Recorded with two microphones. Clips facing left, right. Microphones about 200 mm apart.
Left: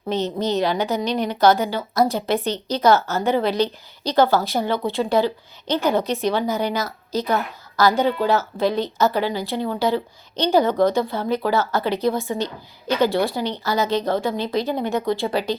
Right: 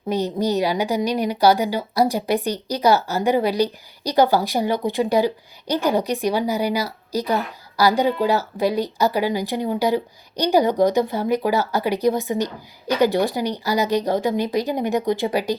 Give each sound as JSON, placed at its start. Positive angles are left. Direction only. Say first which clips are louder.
{"t": 0.1, "sound": "a woman's voice", "louder": "right 1 dB", "side_deg": -10}